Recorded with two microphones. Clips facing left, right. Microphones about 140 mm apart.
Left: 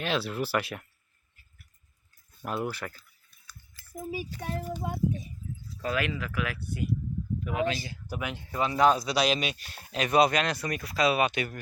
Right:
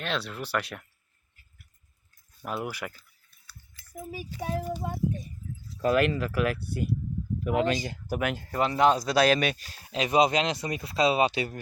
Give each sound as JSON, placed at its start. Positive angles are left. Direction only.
{"t": 0.0, "sound": "speech", "side_deg": 5}
{"t": 2.4, "sound": "speech", "side_deg": 0}
{"t": 4.4, "sound": "speech", "side_deg": -5}
{"t": 5.8, "sound": "speech", "side_deg": -50}
{"t": 7.4, "sound": "speech", "side_deg": -55}
{"t": 9.9, "sound": "speech", "side_deg": -25}